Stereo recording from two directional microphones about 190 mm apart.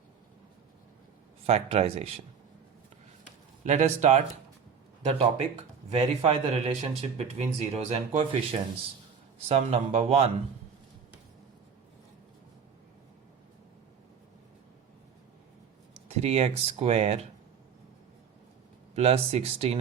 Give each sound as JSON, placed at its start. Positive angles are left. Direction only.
{"t": 1.5, "sound": "speech", "side_deg": -30}
{"t": 3.6, "sound": "speech", "side_deg": -40}
{"t": 5.9, "sound": "speech", "side_deg": -35}
{"t": 16.0, "sound": "speech", "side_deg": -35}
{"t": 18.9, "sound": "speech", "side_deg": -30}